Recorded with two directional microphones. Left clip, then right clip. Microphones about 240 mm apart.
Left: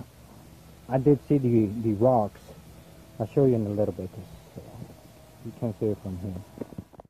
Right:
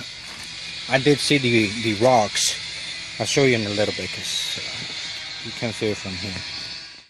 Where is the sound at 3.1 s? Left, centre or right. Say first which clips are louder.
Right 5 dB; right.